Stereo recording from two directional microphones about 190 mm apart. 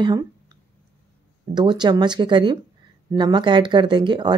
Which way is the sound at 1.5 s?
25° right (ahead or behind).